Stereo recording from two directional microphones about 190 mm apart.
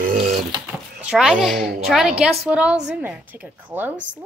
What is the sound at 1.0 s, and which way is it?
A child's voice, 5° right (ahead or behind).